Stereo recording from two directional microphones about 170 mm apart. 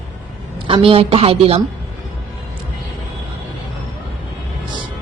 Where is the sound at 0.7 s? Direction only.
35° right (ahead or behind).